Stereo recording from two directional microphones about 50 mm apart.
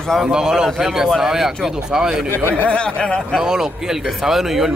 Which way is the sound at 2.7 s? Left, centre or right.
Left.